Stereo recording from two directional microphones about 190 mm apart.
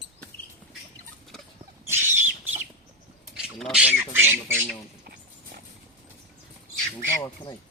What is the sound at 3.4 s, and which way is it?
Speech, centre (ahead or behind).